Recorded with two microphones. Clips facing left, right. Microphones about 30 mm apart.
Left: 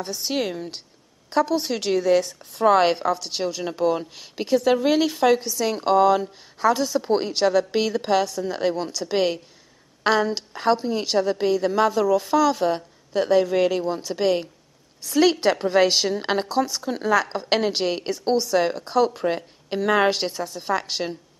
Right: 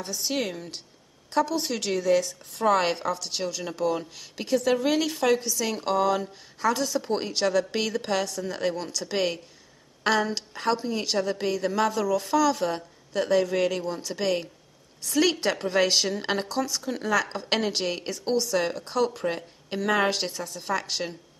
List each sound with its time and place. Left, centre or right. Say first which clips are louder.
0.0 s speech: left 3 dB; centre